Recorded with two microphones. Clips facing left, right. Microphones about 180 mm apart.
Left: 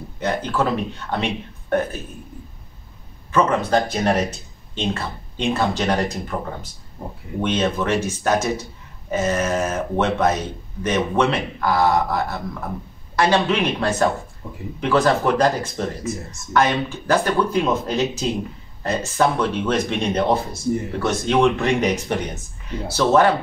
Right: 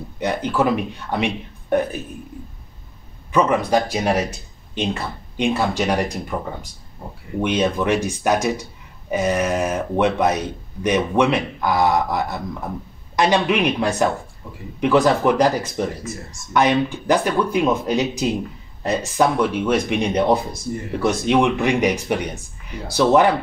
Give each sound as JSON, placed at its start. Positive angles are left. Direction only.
{"t": 0.2, "sound": "speech", "side_deg": -15}
{"t": 3.3, "sound": "speech", "side_deg": -15}
{"t": 7.4, "sound": "speech", "side_deg": -15}